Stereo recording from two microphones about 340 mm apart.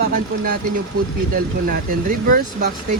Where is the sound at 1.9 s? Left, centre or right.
Right.